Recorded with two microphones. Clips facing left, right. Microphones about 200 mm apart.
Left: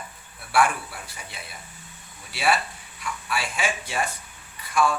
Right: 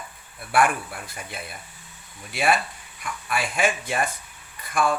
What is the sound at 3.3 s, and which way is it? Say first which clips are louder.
Speech: right 4 dB; 50° right (ahead or behind).